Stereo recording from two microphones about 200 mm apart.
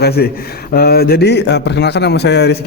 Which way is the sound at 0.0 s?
50° left (ahead or behind).